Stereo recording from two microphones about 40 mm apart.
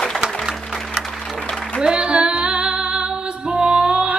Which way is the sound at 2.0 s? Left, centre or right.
Right.